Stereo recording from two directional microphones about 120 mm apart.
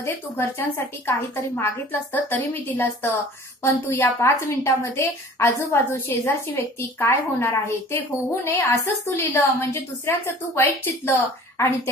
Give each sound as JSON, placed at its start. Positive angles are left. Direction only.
{"t": 0.0, "sound": "a woman's voice", "side_deg": 20}